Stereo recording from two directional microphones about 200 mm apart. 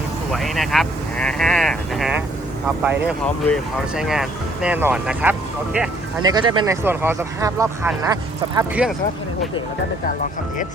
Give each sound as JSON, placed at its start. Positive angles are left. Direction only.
{"t": 0.3, "sound": "speech", "side_deg": 0}
{"t": 6.2, "sound": "speech", "side_deg": -20}
{"t": 6.8, "sound": "speech", "side_deg": -10}